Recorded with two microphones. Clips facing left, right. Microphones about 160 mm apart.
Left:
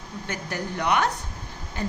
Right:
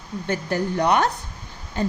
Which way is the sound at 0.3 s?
35° right (ahead or behind).